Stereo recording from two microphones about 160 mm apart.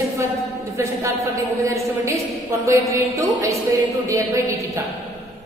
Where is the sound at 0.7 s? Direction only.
15° right (ahead or behind).